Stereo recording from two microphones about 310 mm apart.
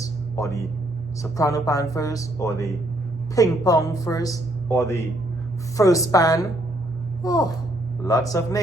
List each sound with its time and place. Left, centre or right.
0.0 s music: centre
1.2 s speech: centre